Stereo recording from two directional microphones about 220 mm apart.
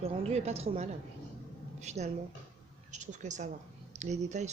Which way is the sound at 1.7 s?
30° right (ahead or behind).